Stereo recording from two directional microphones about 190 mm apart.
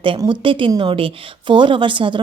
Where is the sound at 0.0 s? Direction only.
25° right (ahead or behind).